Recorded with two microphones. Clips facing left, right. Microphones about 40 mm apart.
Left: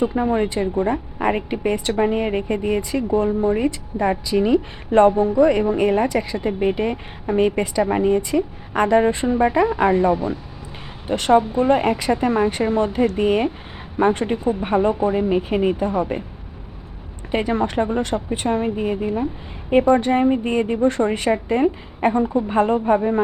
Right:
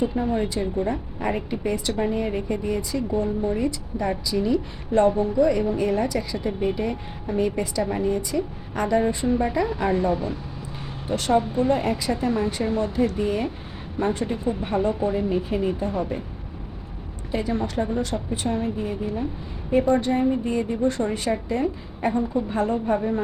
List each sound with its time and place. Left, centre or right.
0.2 s a woman's voice: left
11.3 s speech: left
11.6 s a woman's voice: left
14.6 s a woman's voice: left
17.3 s a woman's voice: left